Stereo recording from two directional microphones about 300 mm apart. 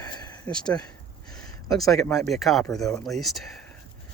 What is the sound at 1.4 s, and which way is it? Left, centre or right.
Speech, centre.